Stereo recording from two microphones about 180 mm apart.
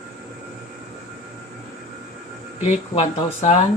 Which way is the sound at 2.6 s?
40° left (ahead or behind).